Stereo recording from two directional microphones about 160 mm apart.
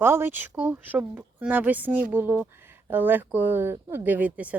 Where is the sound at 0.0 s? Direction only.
15° right (ahead or behind).